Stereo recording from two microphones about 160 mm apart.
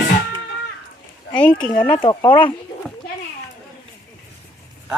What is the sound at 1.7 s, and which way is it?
Speech, 15° left (ahead or behind).